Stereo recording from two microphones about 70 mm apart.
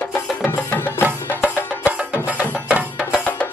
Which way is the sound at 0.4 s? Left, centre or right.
Left.